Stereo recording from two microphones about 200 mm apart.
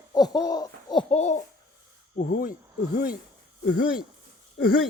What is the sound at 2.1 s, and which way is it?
Speech, 45° left (ahead or behind).